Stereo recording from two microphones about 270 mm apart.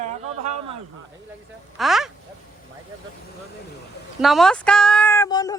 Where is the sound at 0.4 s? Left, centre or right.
Right.